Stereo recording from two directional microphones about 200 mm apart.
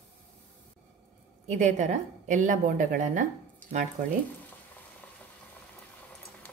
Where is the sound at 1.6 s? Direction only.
40° right (ahead or behind).